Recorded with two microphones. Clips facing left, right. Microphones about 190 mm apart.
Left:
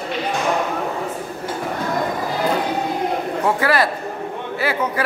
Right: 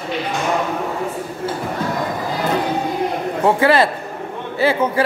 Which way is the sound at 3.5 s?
25° right (ahead or behind).